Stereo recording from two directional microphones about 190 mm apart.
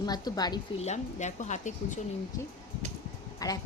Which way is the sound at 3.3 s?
20° left (ahead or behind).